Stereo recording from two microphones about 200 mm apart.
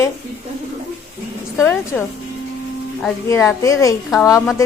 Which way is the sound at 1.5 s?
10° left (ahead or behind).